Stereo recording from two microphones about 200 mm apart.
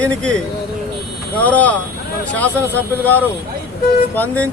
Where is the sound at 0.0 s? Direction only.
5° left (ahead or behind).